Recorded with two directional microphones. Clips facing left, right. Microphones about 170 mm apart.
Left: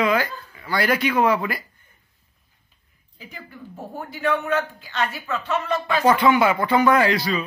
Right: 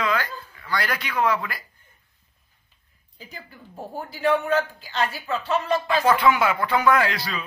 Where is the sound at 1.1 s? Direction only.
20° left (ahead or behind).